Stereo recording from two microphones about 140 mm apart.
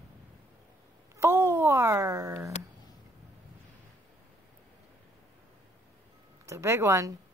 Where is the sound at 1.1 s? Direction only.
20° right (ahead or behind).